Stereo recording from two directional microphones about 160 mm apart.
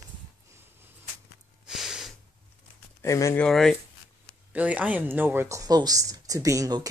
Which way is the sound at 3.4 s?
5° left (ahead or behind).